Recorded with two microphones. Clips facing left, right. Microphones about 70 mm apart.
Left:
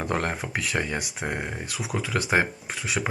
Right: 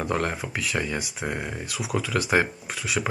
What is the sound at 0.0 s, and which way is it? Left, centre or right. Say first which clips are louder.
Speech: right 1 dB; left.